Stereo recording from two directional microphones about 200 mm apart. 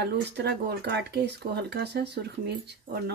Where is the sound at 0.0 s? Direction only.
55° right (ahead or behind).